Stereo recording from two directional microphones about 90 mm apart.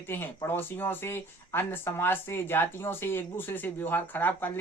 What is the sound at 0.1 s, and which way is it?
Speech, 25° left (ahead or behind).